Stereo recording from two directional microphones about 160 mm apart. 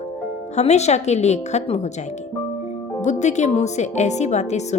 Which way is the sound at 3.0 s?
50° left (ahead or behind).